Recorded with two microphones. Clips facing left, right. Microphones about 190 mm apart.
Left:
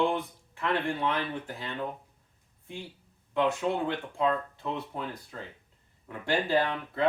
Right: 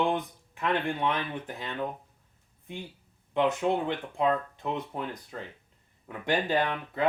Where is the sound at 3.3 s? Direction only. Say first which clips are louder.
Right 1 dB; 20° right (ahead or behind).